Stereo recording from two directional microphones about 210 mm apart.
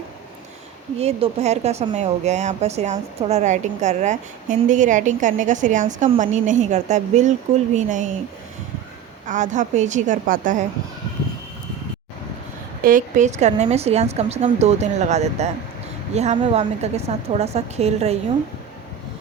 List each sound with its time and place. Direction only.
0.9 s speech: 30° right (ahead or behind)
9.2 s speech: 35° right (ahead or behind)
12.8 s speech: 40° right (ahead or behind)